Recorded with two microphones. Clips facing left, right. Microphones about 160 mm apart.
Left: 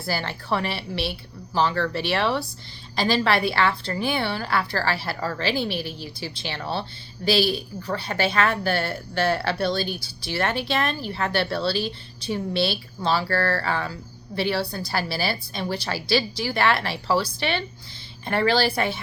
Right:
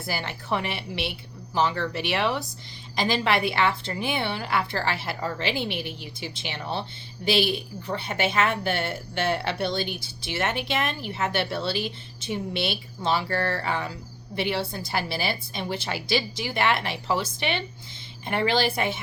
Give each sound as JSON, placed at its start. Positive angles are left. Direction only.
{"t": 0.0, "sound": "a woman's voice", "side_deg": -20}